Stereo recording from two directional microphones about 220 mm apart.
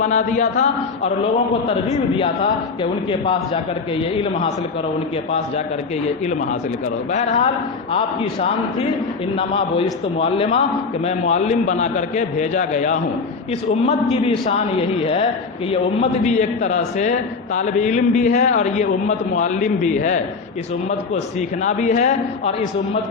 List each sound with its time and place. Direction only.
0.0 s a man's voice: 35° left (ahead or behind)
7.1 s a man's voice: 30° left (ahead or behind)
21.6 s a man's voice: 35° left (ahead or behind)